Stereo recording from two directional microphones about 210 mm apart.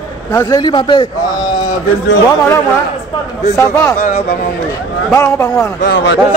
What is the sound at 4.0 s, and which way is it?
Speech, 45° left (ahead or behind).